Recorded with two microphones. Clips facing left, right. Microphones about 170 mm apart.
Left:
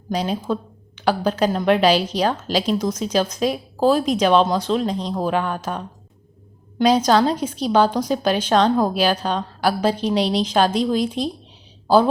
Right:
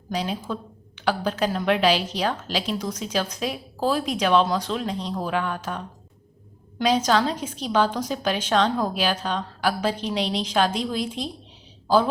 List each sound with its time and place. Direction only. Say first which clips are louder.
0.1 s a woman's voice: left 5 dB; 35° left (ahead or behind)